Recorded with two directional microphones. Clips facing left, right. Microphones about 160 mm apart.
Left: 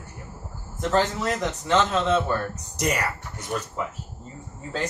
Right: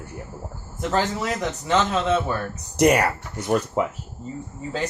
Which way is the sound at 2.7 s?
60° right (ahead or behind).